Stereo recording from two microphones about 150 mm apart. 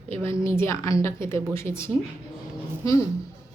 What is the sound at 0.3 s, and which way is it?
A woman's voice, 15° left (ahead or behind).